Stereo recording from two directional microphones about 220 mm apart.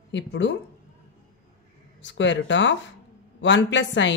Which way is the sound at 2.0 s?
55° left (ahead or behind).